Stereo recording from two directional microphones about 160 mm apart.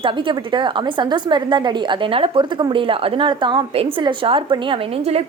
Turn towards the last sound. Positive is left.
turn(degrees=-35)  # may be behind; listen again after turning